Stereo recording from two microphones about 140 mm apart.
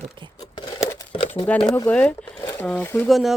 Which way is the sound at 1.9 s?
10° left (ahead or behind).